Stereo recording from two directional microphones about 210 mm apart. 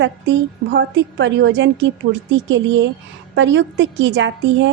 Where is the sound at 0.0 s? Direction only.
55° right (ahead or behind).